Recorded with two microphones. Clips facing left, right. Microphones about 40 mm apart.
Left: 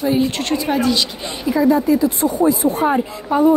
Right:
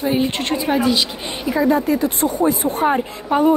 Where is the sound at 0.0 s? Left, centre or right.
Right.